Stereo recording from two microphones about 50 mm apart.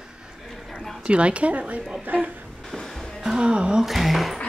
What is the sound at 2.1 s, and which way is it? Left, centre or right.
Speech, right.